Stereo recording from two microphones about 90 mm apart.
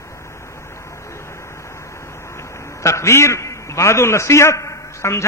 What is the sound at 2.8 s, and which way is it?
A man's voice, 30° left (ahead or behind).